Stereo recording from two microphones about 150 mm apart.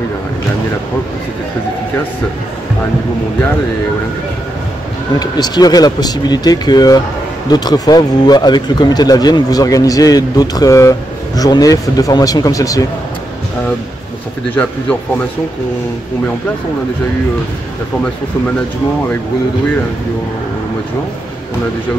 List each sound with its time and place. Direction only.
5.2 s speech: 25° left (ahead or behind)
14.5 s a man's voice: 10° left (ahead or behind)